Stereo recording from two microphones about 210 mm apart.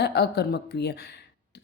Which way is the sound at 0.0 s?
50° left (ahead or behind).